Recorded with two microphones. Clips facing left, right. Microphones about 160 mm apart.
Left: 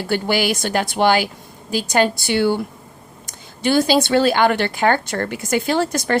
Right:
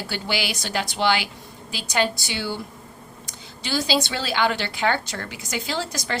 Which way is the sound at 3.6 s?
55° left (ahead or behind).